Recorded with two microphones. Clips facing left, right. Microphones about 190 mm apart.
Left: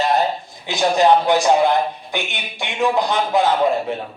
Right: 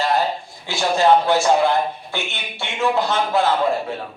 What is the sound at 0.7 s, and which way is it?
Speech, 15° left (ahead or behind).